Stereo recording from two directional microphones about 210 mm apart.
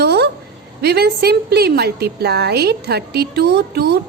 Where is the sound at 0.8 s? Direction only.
50° right (ahead or behind).